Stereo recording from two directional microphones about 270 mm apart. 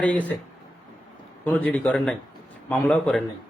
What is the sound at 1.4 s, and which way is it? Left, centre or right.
Speech, centre.